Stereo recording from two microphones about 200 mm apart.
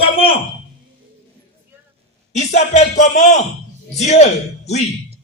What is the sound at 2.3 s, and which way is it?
A man's voice, 35° left (ahead or behind).